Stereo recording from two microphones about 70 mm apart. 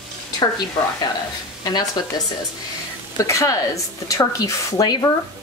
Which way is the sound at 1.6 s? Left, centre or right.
Left.